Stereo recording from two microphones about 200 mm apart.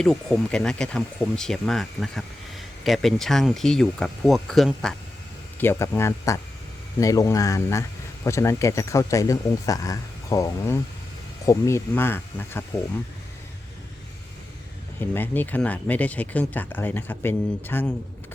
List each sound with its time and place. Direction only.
0.0 s speech: centre (ahead or behind)
15.1 s speech: 10° left (ahead or behind)